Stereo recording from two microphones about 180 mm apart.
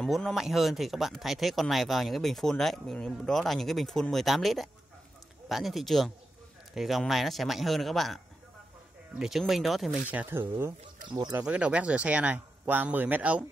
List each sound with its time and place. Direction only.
0.0 s speech: centre (ahead or behind)
9.2 s speech: centre (ahead or behind)
11.1 s speech: 25° right (ahead or behind)
11.3 s speech: 5° right (ahead or behind)